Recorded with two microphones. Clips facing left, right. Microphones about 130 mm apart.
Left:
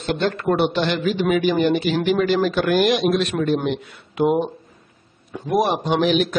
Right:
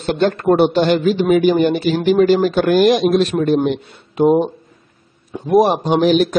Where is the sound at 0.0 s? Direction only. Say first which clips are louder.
Right 5 dB; 40° right (ahead or behind).